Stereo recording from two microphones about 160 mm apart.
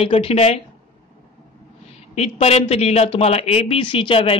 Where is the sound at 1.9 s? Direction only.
40° left (ahead or behind).